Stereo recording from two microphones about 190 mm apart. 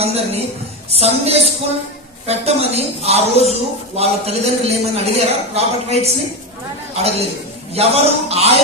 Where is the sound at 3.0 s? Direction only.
35° right (ahead or behind).